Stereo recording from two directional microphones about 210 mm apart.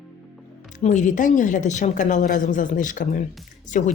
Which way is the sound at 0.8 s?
35° left (ahead or behind).